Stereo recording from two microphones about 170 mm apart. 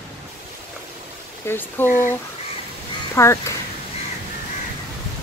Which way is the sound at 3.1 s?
15° left (ahead or behind).